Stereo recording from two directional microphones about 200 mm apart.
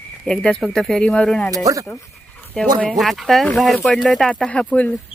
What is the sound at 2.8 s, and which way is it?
Speech, centre (ahead or behind).